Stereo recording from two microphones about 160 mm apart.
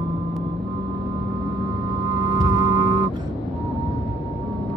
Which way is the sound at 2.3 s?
25° right (ahead or behind).